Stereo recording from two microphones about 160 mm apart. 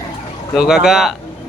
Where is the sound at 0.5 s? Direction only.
5° right (ahead or behind).